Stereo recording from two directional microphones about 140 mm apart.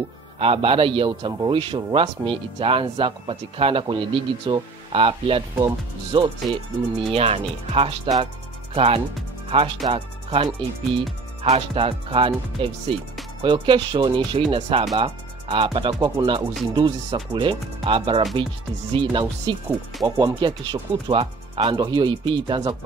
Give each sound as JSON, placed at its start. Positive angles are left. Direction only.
{"t": 0.4, "sound": "a man's voice", "side_deg": -40}
{"t": 20.0, "sound": "speech", "side_deg": -25}
{"t": 20.3, "sound": "a man's voice", "side_deg": -35}